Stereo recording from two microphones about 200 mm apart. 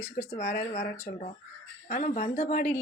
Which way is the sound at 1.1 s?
45° left (ahead or behind).